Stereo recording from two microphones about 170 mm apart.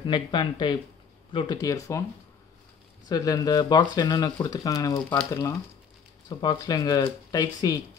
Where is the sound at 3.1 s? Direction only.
20° left (ahead or behind).